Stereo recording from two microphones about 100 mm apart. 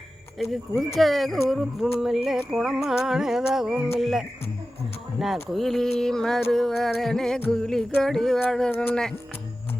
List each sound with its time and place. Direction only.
0.9 s music: centre (ahead or behind)
8.7 s speech: 20° left (ahead or behind)